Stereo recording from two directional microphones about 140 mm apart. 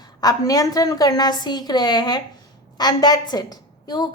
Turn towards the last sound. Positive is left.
turn(degrees=30)  # may be behind; listen again after turning